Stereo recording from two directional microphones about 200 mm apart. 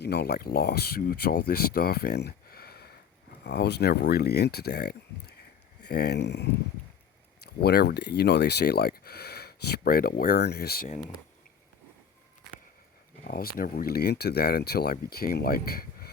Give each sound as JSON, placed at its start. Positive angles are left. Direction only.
{"t": 0.0, "sound": "speech", "side_deg": 55}
{"t": 13.2, "sound": "speech", "side_deg": 45}